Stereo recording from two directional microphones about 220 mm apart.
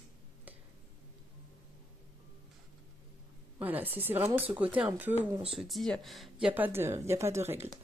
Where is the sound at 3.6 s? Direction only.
5° right (ahead or behind).